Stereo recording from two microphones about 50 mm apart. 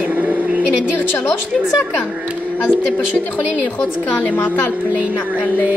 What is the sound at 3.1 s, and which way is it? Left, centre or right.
A woman's voice, left.